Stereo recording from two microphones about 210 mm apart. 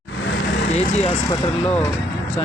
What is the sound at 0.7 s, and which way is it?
Vehicle, 30° left (ahead or behind).